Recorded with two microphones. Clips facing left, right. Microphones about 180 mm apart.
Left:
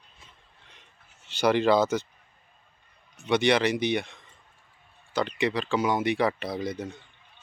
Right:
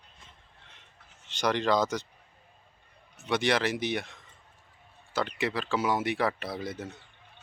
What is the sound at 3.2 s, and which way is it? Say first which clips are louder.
Speech: left 4 dB; centre (ahead or behind).